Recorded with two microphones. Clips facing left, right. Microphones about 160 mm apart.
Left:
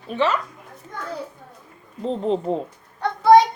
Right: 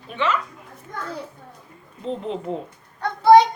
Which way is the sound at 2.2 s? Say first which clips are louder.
Left 10 dB; 35° left (ahead or behind).